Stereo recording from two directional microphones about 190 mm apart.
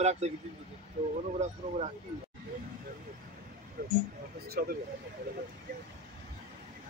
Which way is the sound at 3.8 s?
55° right (ahead or behind).